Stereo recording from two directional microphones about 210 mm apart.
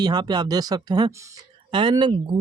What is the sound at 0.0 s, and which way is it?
Speech, 20° right (ahead or behind).